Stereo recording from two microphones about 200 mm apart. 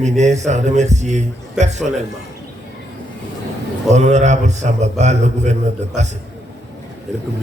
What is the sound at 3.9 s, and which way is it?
A man's voice, 35° right (ahead or behind).